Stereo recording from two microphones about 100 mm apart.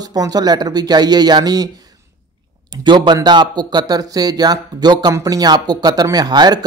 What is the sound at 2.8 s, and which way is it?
Speech, 50° right (ahead or behind).